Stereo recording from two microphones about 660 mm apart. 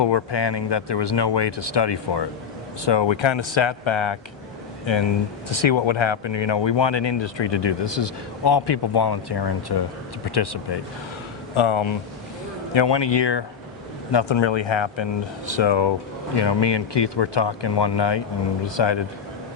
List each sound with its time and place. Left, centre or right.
0.0 s speech: left
5.5 s speech: left